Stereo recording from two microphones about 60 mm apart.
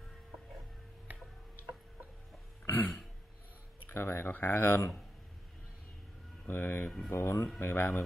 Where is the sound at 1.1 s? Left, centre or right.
Right.